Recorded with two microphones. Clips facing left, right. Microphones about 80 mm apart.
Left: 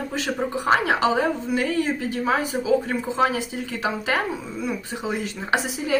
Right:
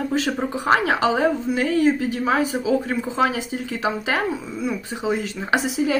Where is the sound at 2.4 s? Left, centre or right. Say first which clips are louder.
Right 3 dB; left.